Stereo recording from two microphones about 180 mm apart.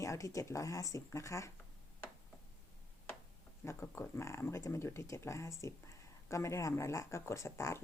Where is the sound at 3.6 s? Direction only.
15° left (ahead or behind).